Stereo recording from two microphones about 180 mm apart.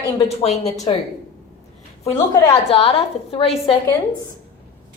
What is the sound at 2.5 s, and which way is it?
A woman's voice, 30° left (ahead or behind).